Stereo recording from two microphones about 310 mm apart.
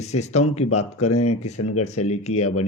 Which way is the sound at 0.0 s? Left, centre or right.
Left.